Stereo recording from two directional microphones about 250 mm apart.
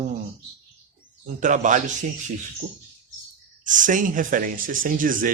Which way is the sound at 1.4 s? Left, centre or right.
Right.